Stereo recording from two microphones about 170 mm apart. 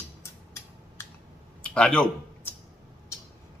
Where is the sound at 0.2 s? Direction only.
15° left (ahead or behind).